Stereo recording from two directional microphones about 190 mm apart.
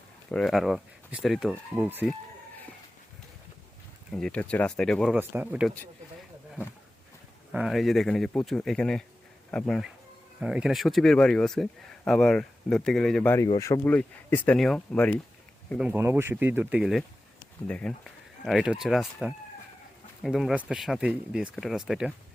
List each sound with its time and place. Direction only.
0.3 s speech: 5° left (ahead or behind)
4.1 s speech: 5° left (ahead or behind)
5.3 s speech: 10° right (ahead or behind)
7.5 s speech: centre (ahead or behind)
15.8 s speech: 10° right (ahead or behind)